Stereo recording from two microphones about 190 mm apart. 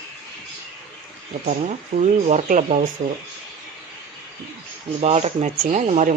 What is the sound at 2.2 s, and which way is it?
Speech, 40° right (ahead or behind).